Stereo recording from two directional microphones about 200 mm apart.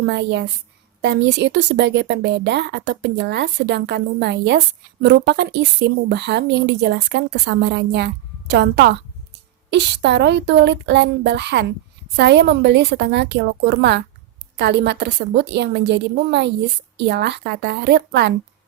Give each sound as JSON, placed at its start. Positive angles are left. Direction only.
{"t": 0.0, "sound": "a woman's voice", "side_deg": -55}